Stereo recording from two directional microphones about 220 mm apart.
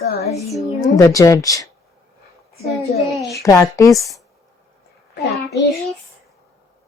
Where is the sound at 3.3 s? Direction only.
15° left (ahead or behind).